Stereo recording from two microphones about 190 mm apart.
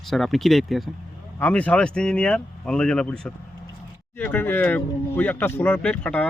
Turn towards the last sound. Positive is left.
turn(degrees=10)  # may be behind; listen again after turning